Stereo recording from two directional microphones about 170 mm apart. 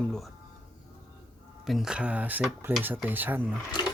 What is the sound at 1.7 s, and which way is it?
Speech, centre (ahead or behind).